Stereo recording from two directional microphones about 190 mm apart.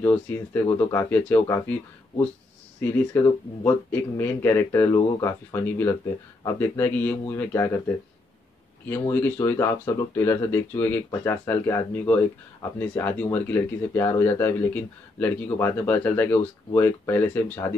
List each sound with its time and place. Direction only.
0.0 s speech: 10° left (ahead or behind)
8.8 s speech: 10° left (ahead or behind)